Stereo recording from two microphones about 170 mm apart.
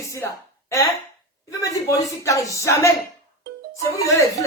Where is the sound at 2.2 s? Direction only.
20° left (ahead or behind).